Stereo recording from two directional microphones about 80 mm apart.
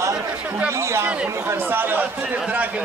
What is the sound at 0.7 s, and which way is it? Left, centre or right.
Speech, right.